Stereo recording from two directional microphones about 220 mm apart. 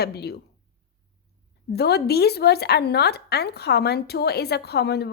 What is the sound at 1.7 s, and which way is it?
Speech, 45° left (ahead or behind).